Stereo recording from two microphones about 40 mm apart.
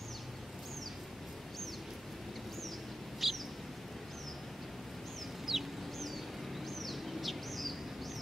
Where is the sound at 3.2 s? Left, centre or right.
Centre.